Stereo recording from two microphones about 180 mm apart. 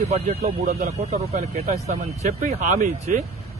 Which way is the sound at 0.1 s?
40° right (ahead or behind).